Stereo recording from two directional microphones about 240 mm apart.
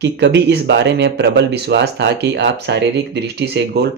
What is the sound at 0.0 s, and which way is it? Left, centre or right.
Speech, right.